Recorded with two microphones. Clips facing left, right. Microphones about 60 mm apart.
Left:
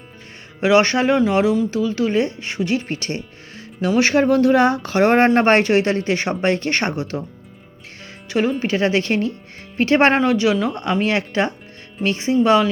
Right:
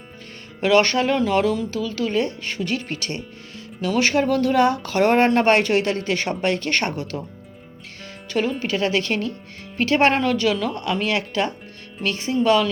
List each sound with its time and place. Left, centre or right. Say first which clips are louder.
0.6 s speech: left 2 dB; centre
8.3 s speech: left 3 dB; centre
8.6 s speech: left 3 dB; left